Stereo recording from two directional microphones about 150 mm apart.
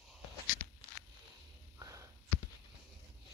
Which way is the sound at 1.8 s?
20° right (ahead or behind).